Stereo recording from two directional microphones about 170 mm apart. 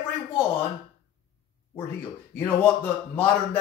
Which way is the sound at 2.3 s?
10° left (ahead or behind).